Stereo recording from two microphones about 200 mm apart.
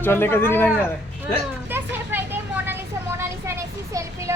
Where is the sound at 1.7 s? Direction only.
10° right (ahead or behind).